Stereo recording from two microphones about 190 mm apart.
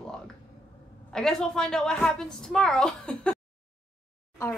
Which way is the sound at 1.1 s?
5° left (ahead or behind).